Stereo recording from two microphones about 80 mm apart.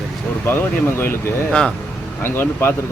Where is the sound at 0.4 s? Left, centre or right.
Left.